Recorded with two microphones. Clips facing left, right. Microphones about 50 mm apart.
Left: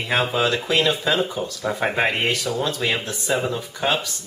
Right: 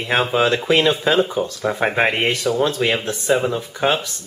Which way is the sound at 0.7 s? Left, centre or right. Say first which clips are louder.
Right 5 dB; right.